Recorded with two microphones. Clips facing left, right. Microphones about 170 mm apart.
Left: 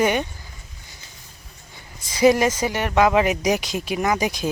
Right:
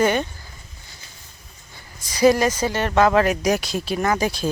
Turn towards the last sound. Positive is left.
turn(degrees=15)  # may be behind; listen again after turning